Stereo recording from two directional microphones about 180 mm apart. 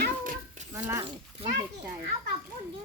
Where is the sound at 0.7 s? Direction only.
15° right (ahead or behind).